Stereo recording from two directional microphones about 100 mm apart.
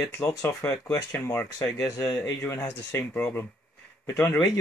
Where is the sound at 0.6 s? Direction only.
30° left (ahead or behind).